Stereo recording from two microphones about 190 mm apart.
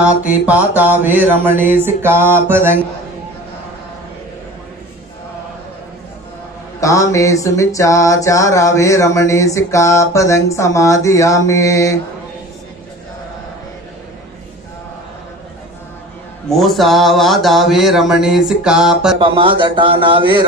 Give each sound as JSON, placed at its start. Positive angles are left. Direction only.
{"t": 0.0, "sound": "mantra", "side_deg": -10}
{"t": 6.8, "sound": "a sound", "side_deg": 15}
{"t": 16.4, "sound": "speech", "side_deg": 0}
{"t": 19.1, "sound": "a man's voice", "side_deg": -25}